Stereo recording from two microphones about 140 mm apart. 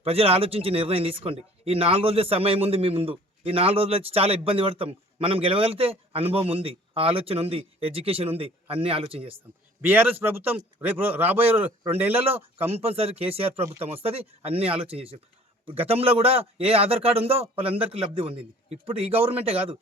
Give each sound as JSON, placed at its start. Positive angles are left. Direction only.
{"t": 0.0, "sound": "speech", "side_deg": -45}
{"t": 9.8, "sound": "a man's voice", "side_deg": -15}
{"t": 12.7, "sound": "a man's voice", "side_deg": -45}